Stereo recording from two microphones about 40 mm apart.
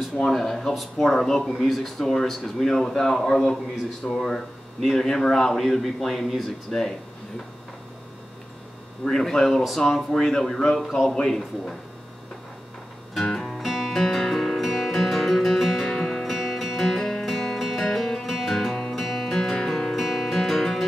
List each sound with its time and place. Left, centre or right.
0.3 s a man's voice: centre
5.6 s a man's voice: centre
9.0 s a man's voice: centre
13.1 s music: centre
16.1 s music: centre
20.1 s music: centre